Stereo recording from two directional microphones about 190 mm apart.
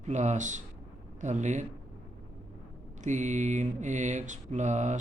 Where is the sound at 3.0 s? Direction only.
40° right (ahead or behind).